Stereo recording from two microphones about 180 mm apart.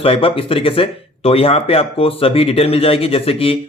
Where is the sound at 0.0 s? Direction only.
30° left (ahead or behind).